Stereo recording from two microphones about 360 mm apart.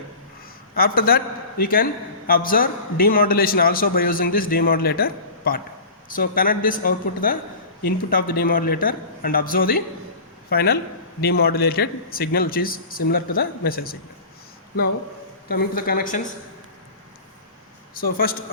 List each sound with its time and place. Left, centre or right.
0.8 s a man's voice: left
15.4 s a man's voice: left
17.9 s a man's voice: left